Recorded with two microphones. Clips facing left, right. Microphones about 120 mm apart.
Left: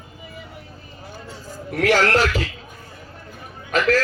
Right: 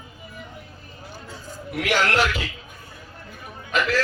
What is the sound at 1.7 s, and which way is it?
Speech, 40° left (ahead or behind).